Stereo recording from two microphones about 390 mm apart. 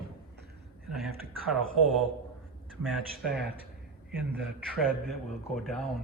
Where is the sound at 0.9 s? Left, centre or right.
Centre.